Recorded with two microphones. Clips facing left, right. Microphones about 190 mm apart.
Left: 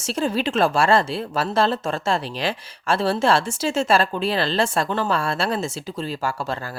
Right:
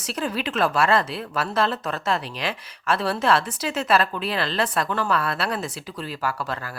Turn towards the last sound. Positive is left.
turn(degrees=25)  # may be behind; listen again after turning